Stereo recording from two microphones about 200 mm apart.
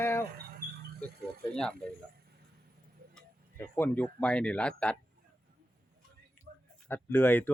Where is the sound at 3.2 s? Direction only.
10° left (ahead or behind).